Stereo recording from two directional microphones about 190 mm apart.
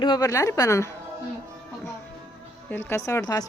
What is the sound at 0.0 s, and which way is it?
Speech, 20° left (ahead or behind).